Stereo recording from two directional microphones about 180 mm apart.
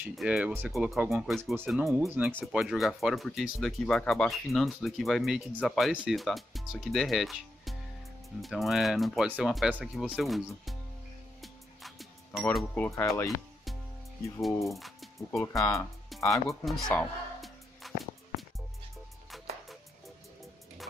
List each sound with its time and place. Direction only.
0.1 s speech: 5° right (ahead or behind)
1.3 s speech: 10° right (ahead or behind)
11.4 s music: centre (ahead or behind)
12.5 s speech: 10° left (ahead or behind)
14.4 s speech: centre (ahead or behind)
15.6 s speech: 15° left (ahead or behind)
16.1 s music: centre (ahead or behind)